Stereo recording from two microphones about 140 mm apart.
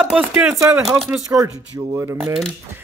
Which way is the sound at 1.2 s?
25° right (ahead or behind).